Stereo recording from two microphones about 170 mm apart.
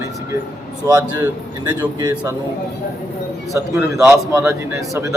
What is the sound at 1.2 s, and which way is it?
Speech, 10° right (ahead or behind).